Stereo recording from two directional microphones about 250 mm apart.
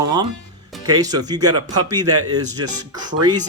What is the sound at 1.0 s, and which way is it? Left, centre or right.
Speech, centre.